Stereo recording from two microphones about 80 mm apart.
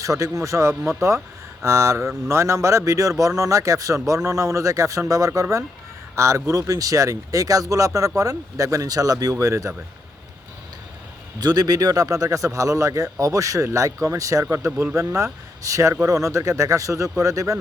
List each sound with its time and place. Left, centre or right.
0.0 s speech: right
11.3 s speech: right